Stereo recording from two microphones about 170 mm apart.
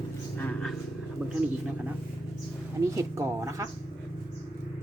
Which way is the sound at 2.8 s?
15° right (ahead or behind).